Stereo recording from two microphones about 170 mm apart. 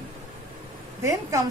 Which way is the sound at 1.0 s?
20° right (ahead or behind).